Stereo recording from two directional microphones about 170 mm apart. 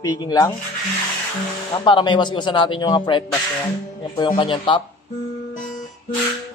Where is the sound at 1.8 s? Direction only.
30° left (ahead or behind).